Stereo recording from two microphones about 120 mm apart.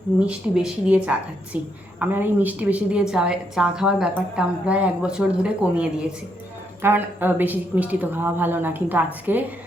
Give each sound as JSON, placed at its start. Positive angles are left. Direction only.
{"t": 0.3, "sound": "a woman's voice", "side_deg": -10}